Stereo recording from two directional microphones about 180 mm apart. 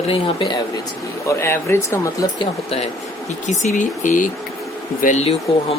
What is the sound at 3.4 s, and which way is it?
Speech, 40° left (ahead or behind).